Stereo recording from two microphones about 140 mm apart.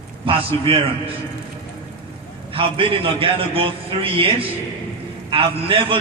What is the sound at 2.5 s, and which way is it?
A man's voice, 40° right (ahead or behind).